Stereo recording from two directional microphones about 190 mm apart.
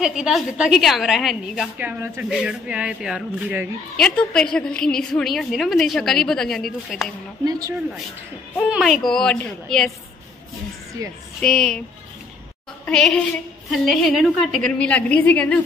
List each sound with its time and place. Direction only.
0.0 s a woman's voice: 5° right (ahead or behind)
7.4 s speech: 20° right (ahead or behind)
8.5 s a woman's voice: centre (ahead or behind)
11.0 s speech: 15° right (ahead or behind)
11.4 s a woman's voice: 5° left (ahead or behind)
12.8 s a woman's voice: 5° left (ahead or behind)